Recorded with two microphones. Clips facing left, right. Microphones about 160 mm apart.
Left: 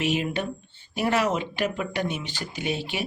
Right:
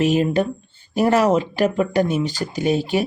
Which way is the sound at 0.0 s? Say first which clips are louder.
Right 8 dB; 40° right (ahead or behind).